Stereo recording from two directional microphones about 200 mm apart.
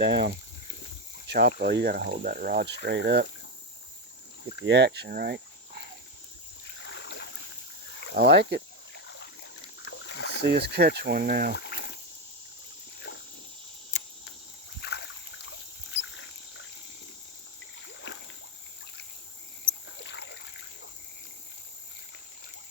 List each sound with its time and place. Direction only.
0.1 s speech: 25° right (ahead or behind)
1.3 s speech: 50° right (ahead or behind)
2.8 s speech: 60° right (ahead or behind)
4.6 s speech: 60° right (ahead or behind)
6.8 s boat: 60° left (ahead or behind)
8.2 s speech: 60° right (ahead or behind)
9.0 s a sound: 65° left (ahead or behind)
10.4 s speech: 50° right (ahead or behind)
11.5 s boiling: 55° left (ahead or behind)
13.1 s a sound: 55° left (ahead or behind)
14.8 s a sound: 60° left (ahead or behind)
15.9 s a sound: 75° left (ahead or behind)
18.1 s splash: 65° left (ahead or behind)
20.1 s splash: 60° left (ahead or behind)